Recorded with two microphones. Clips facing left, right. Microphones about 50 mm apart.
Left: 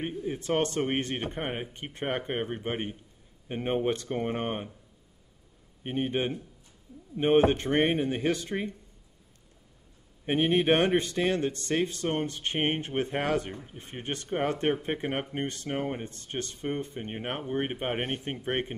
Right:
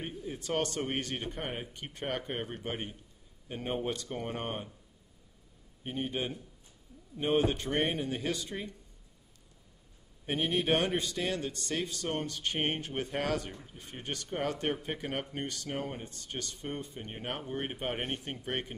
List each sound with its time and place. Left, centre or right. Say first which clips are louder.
0.0 s speech: left 7 dB; left
5.9 s speech: left 6 dB; left
10.2 s speech: left 6 dB; left